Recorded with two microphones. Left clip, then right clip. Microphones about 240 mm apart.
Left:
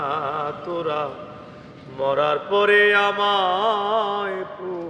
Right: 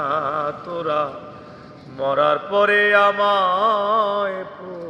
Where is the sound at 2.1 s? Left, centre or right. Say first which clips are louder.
Right 2 dB; centre.